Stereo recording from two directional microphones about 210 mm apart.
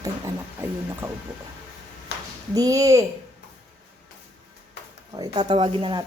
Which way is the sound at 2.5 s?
15° right (ahead or behind).